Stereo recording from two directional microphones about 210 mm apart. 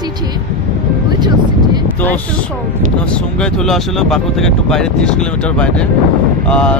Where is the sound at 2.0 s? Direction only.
10° left (ahead or behind).